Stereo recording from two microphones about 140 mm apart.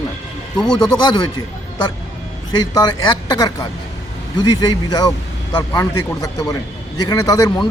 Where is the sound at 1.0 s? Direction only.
30° left (ahead or behind).